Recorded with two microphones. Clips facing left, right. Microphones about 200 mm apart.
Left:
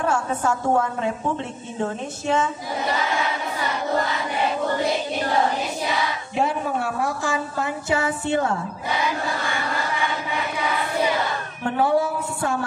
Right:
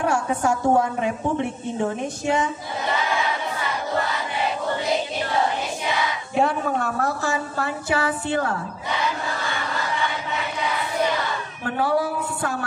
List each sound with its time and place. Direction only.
0.0 s a woman's voice: 15° right (ahead or behind)
6.3 s speech: centre (ahead or behind)
7.0 s a woman's voice: 15° left (ahead or behind)
11.8 s a sound: 25° left (ahead or behind)